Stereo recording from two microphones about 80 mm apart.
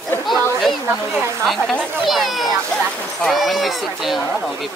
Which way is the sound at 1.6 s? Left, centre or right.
Centre.